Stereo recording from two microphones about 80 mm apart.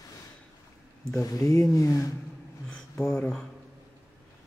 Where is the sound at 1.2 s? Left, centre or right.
Left.